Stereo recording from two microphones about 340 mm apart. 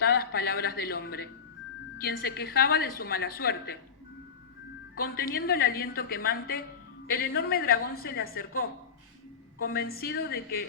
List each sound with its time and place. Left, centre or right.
0.0 s a woman's voice: left
4.9 s a woman's voice: left